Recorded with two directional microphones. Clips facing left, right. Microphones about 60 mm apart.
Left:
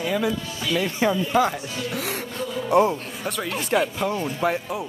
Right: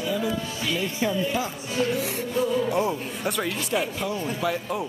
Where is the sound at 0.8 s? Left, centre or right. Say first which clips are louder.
Left 5 dB; left.